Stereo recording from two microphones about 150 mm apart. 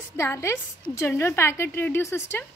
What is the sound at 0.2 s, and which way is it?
A woman's voice, 15° left (ahead or behind).